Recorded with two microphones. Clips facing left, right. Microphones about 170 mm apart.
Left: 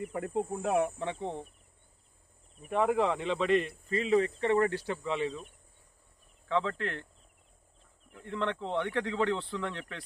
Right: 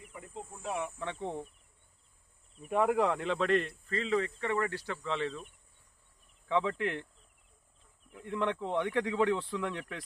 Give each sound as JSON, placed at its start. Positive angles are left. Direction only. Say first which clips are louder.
{"t": 0.0, "sound": "speech", "louder": "left 13 dB", "side_deg": 65}
{"t": 1.2, "sound": "speech", "louder": "left 1 dB", "side_deg": 0}
{"t": 2.7, "sound": "speech", "louder": "even", "side_deg": 0}
{"t": 3.9, "sound": "speech", "louder": "left 5 dB", "side_deg": 20}
{"t": 6.5, "sound": "speech", "louder": "right 1 dB", "side_deg": -10}
{"t": 8.1, "sound": "speech", "louder": "right 1 dB", "side_deg": -10}